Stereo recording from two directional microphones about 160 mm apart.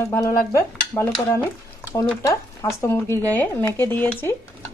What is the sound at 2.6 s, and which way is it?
Speech, 15° left (ahead or behind).